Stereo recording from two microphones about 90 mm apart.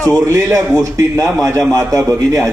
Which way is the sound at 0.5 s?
35° right (ahead or behind).